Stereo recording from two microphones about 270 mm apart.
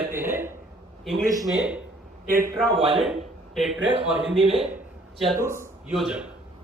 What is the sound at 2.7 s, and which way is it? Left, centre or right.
Speech, centre.